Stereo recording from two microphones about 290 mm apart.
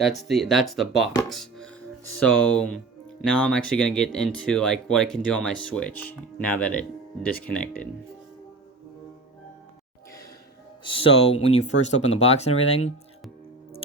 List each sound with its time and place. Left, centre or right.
0.0 s speech: centre
10.8 s speech: centre